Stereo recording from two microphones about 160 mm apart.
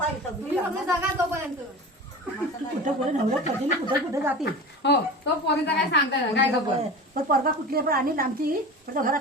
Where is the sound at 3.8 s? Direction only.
15° right (ahead or behind).